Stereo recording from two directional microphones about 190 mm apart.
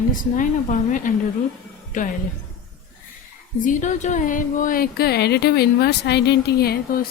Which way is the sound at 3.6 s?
40° left (ahead or behind).